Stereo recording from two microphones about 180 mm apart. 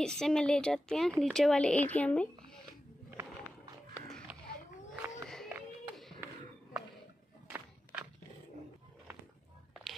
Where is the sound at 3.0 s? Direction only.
15° right (ahead or behind).